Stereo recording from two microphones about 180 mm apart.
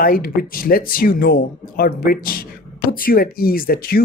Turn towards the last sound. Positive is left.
turn(degrees=55)  # may be behind; listen again after turning